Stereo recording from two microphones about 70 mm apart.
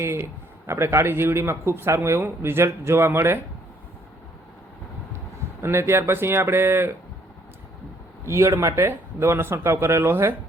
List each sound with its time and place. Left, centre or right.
0.0 s a man's voice: right
5.6 s a man's voice: right
8.2 s a man's voice: right